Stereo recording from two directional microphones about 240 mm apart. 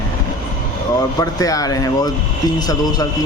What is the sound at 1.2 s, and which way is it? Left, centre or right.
Speech, centre.